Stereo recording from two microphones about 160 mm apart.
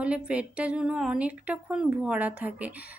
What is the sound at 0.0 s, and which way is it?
Speech, 5° right (ahead or behind).